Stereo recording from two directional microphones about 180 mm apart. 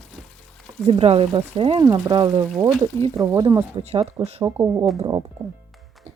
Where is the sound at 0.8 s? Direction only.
35° right (ahead or behind).